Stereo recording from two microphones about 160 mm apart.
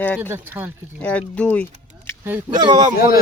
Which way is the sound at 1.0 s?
10° left (ahead or behind).